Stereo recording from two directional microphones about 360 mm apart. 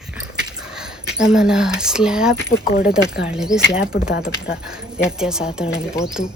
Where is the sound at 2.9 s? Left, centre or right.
Centre.